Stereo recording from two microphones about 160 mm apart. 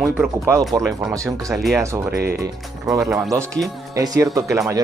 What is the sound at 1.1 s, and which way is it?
Speech, 20° right (ahead or behind).